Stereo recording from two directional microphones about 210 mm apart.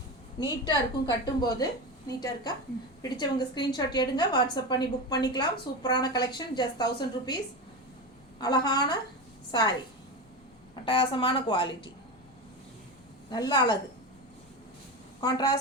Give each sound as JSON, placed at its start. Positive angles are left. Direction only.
{"t": 0.3, "sound": "a woman's voice", "side_deg": 20}
{"t": 8.4, "sound": "a woman's voice", "side_deg": 20}
{"t": 10.8, "sound": "a woman's voice", "side_deg": 25}
{"t": 13.3, "sound": "a woman's voice", "side_deg": 20}
{"t": 15.2, "sound": "a woman's voice", "side_deg": 20}